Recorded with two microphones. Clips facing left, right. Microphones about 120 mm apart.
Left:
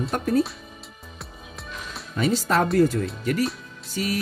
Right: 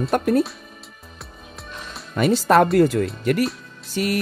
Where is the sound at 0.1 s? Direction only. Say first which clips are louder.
Right 6 dB; 65° right (ahead or behind).